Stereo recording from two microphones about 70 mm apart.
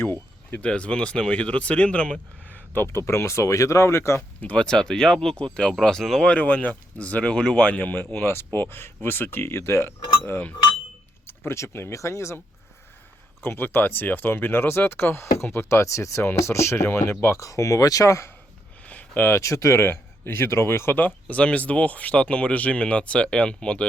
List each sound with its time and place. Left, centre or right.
0.5 s speech: centre
2.7 s speech: left
4.4 s speech: centre
6.3 s speech: left
11.3 s speech: left
13.4 s speech: left
17.3 s speech: left
18.9 s a sound: left
19.4 s speech: left; by 23.8 s centre